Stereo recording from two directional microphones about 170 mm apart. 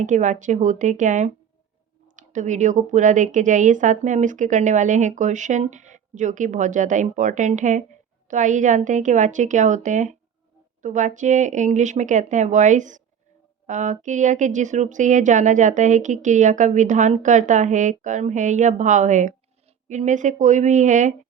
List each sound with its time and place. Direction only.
0.0 s a woman's voice: 45° right (ahead or behind)